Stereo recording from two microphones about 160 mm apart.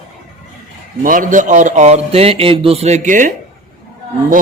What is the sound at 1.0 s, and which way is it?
A man's voice, 55° right (ahead or behind).